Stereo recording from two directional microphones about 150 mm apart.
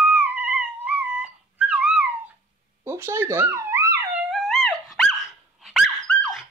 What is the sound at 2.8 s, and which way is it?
Dog, 15° right (ahead or behind).